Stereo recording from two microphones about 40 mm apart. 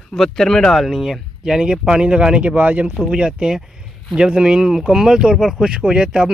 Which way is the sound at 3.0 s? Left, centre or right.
Right.